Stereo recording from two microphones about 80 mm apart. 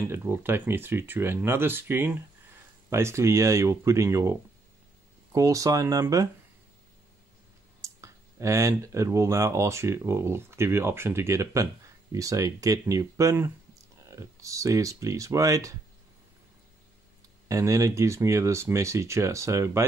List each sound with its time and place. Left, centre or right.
0.1 s speech: right
7.8 s speech: right
17.5 s speech: right